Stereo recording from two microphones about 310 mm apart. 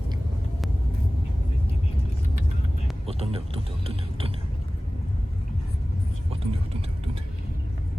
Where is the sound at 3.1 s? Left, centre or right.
Centre.